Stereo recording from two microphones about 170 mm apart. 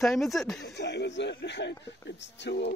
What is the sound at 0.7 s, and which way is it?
Speech, 85° left.